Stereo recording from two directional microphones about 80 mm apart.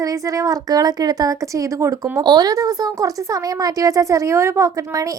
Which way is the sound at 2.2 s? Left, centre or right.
Right.